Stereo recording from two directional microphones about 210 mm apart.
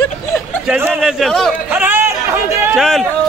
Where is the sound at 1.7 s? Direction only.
10° right (ahead or behind).